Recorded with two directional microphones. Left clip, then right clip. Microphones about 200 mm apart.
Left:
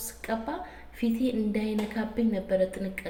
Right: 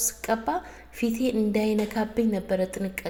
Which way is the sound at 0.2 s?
45° right (ahead or behind).